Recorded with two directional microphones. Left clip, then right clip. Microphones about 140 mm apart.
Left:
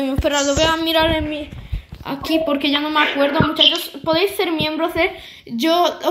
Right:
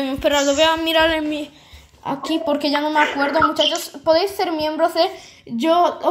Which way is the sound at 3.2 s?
25° right (ahead or behind).